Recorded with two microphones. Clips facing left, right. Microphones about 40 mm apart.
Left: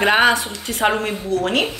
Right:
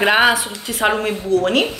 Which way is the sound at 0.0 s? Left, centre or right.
Centre.